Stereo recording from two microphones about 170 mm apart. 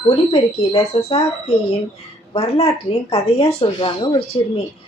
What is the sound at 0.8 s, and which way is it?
Speech, 40° left (ahead or behind).